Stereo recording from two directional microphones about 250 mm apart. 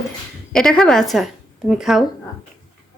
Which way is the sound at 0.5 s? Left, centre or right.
Centre.